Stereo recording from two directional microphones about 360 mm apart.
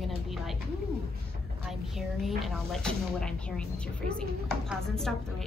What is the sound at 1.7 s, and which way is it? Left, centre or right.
Speech, centre.